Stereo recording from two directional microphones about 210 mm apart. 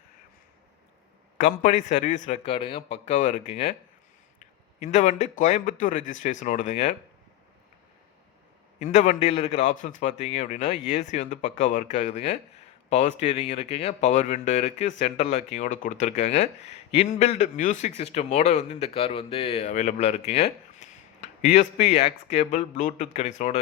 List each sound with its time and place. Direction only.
1.4 s a man's voice: 35° left (ahead or behind)
8.8 s speech: 35° left (ahead or behind)